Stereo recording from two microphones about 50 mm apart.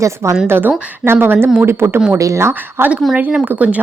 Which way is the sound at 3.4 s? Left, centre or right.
Right.